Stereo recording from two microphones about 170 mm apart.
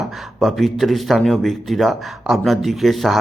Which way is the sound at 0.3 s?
Centre (ahead or behind).